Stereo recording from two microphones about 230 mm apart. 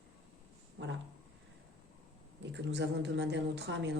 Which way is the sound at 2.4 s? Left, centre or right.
Right.